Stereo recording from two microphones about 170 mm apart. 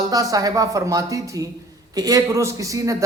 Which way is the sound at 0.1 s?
20° right (ahead or behind).